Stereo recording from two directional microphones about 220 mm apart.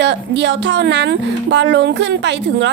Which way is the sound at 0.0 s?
55° right (ahead or behind).